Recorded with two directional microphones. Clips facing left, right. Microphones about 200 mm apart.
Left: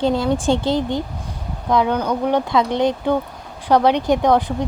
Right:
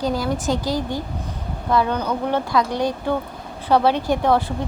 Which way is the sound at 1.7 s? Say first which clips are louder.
Left 2 dB; 15° left (ahead or behind).